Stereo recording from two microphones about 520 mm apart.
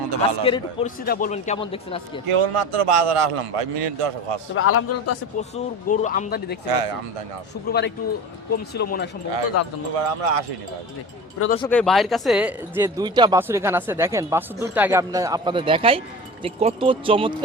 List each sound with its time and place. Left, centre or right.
0.0 s a sound: right
0.4 s a man's voice: centre
2.2 s a man's voice: right
4.5 s a man's voice: left
5.4 s a man's voice: centre
6.7 s a man's voice: right
7.7 s a man's voice: centre
9.9 s speech: right
11.5 s speech: centre